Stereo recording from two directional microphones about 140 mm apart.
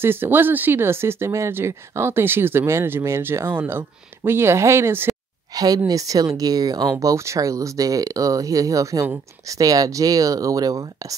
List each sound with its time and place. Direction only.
0.0 s speech: 15° right (ahead or behind)
5.5 s a woman's voice: 25° right (ahead or behind)